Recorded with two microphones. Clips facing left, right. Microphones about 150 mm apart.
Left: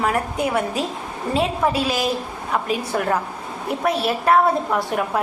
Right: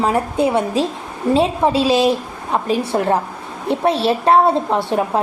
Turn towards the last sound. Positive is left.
turn(degrees=-25)  # may be behind; listen again after turning